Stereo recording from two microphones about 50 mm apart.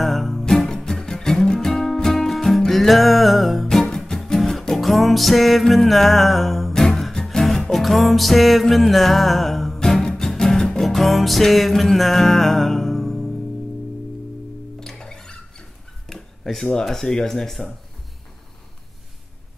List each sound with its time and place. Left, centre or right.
0.0 s music: centre
6.7 s music: centre
10.0 s music: centre
14.8 s music: centre
16.1 s speech: centre